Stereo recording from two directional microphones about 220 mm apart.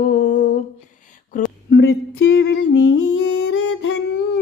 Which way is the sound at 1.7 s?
55° left (ahead or behind).